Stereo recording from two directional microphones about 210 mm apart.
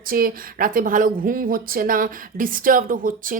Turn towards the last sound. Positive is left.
turn(degrees=-40)  # may be behind; listen again after turning